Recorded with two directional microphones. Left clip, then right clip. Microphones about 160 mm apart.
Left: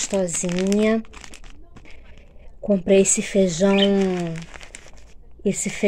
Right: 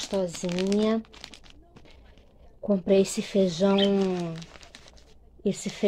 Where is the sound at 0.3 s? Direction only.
10° right (ahead or behind).